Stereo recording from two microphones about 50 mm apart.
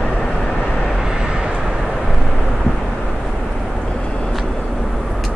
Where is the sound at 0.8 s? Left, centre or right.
Centre.